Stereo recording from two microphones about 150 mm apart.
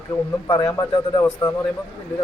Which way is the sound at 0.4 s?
25° left (ahead or behind).